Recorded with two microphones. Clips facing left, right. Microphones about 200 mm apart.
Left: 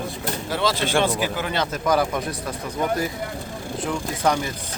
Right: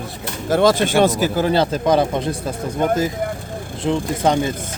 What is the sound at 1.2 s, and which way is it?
Speech, 35° right (ahead or behind).